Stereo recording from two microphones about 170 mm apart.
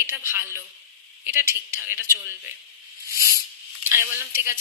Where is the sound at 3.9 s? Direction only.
15° right (ahead or behind).